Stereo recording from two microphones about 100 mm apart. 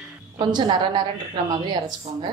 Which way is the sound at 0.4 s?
45° right (ahead or behind).